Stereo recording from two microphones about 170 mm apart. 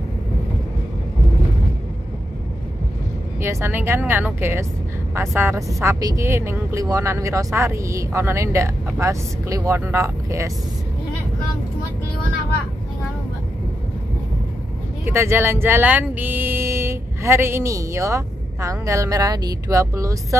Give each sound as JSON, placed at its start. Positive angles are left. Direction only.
{"t": 3.3, "sound": "speech", "side_deg": -15}
{"t": 15.0, "sound": "speech", "side_deg": -15}